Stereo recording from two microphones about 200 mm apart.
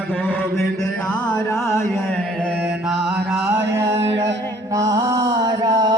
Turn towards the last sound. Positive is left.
turn(degrees=-20)  # may be behind; listen again after turning